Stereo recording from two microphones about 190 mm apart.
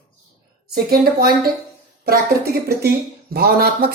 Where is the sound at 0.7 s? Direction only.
55° right (ahead or behind).